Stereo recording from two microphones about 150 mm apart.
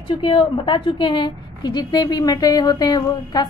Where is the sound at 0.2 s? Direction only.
35° left (ahead or behind).